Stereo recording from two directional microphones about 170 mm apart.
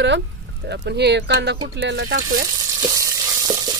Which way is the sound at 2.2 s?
55° right (ahead or behind).